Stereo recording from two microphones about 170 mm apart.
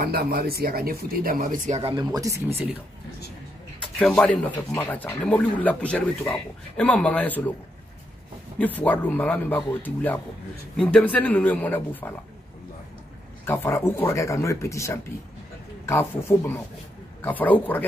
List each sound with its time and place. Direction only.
0.0 s speech: 60° right (ahead or behind)
1.8 s speech: 35° right (ahead or behind)
2.1 s speech: 20° right (ahead or behind)
4.0 s speech: 5° left (ahead or behind)
8.5 s speech: 10° left (ahead or behind)
13.5 s speech: 15° left (ahead or behind)